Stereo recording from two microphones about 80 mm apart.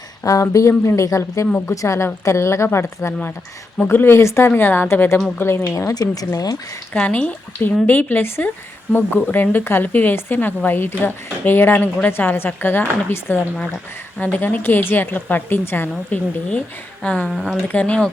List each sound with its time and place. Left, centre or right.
0.4 s speech: left
3.1 s speech: left
5.9 s speech: left
6.9 s speech: centre
16.5 s speech: centre
17.2 s speech: centre
17.7 s speech: centre